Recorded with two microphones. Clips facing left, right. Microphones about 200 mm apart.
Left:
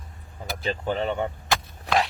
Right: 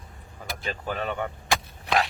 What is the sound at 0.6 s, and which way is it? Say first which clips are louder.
Speech: left 5 dB; 25° left (ahead or behind).